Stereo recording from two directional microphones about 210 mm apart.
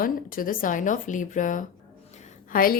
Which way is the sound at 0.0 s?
40° left (ahead or behind).